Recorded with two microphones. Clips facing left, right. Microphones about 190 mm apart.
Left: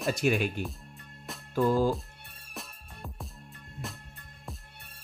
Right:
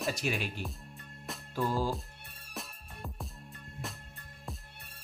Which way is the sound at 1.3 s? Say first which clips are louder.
Even; centre (ahead or behind).